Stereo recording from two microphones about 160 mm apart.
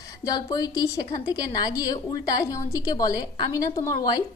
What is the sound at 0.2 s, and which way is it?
A woman's voice, 20° left (ahead or behind).